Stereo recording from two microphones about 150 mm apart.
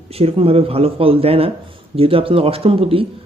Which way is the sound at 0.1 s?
40° right (ahead or behind).